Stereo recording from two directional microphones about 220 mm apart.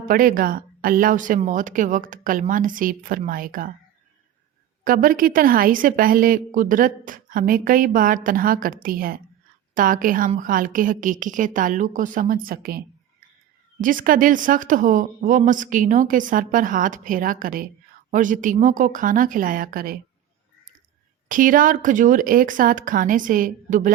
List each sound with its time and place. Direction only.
0.0 s a woman's voice: 40° right (ahead or behind)
4.8 s a woman's voice: 40° right (ahead or behind)
21.2 s a woman's voice: 35° right (ahead or behind)